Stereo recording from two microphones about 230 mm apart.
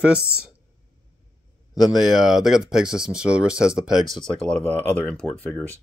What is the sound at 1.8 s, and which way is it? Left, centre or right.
Speech, centre.